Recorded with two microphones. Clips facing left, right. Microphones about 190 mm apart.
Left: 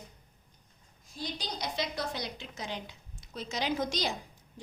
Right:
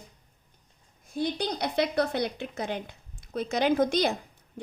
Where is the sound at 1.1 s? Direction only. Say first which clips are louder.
Right 10 dB; 60° right (ahead or behind).